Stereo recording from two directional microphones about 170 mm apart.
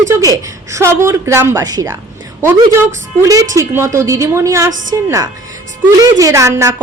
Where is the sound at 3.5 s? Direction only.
15° right (ahead or behind).